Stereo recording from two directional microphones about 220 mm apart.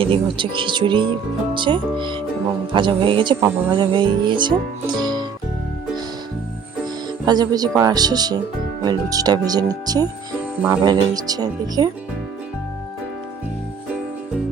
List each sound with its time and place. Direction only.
0.0 s music: 25° right (ahead or behind)
7.3 s speech: 20° right (ahead or behind)